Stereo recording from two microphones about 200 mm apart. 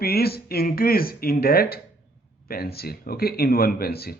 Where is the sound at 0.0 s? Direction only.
50° left (ahead or behind).